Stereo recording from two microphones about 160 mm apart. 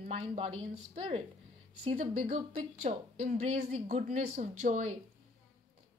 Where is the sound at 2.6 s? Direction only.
45° right (ahead or behind).